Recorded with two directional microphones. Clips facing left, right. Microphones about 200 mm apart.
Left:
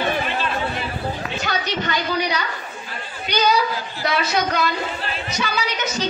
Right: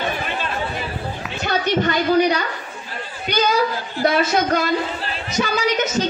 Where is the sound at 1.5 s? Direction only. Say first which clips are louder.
Right 7 dB; 50° right (ahead or behind).